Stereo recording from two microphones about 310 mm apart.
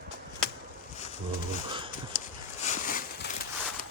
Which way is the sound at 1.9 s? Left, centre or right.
Left.